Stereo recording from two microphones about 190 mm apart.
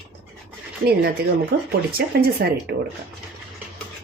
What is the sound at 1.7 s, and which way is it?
Speech, 55° right (ahead or behind).